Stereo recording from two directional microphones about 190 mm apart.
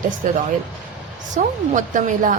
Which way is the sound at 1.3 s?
45° right (ahead or behind).